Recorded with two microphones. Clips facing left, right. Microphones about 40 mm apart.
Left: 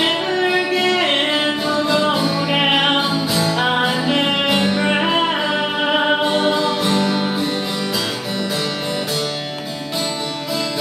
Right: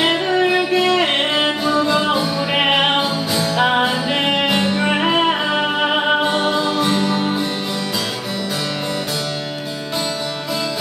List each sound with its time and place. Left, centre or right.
0.0 s music: centre